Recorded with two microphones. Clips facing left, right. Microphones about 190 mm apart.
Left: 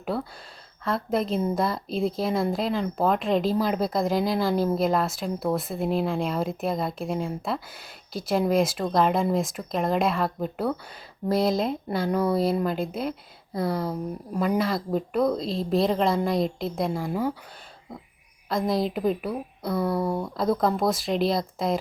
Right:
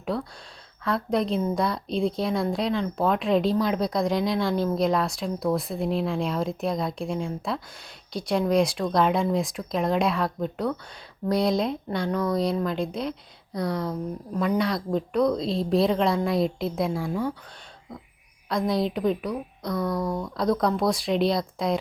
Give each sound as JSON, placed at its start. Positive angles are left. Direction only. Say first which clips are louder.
{"t": 0.1, "sound": "a woman's voice", "louder": "even", "side_deg": 5}
{"t": 18.4, "sound": "a woman's voice", "louder": "even", "side_deg": 0}
{"t": 19.8, "sound": "speech", "louder": "left 2 dB", "side_deg": 30}
{"t": 20.3, "sound": "a woman's voice", "louder": "right 1 dB", "side_deg": 0}